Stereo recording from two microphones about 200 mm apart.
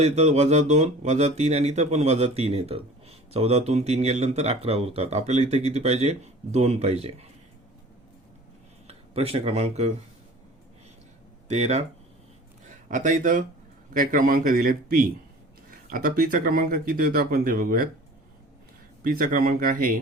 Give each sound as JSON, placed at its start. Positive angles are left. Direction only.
{"t": 0.0, "sound": "speech", "side_deg": -35}
{"t": 8.9, "sound": "speech", "side_deg": -30}
{"t": 11.4, "sound": "speech", "side_deg": -35}
{"t": 19.0, "sound": "speech", "side_deg": -45}